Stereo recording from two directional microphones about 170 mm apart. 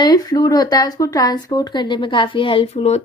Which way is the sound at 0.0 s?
25° left (ahead or behind).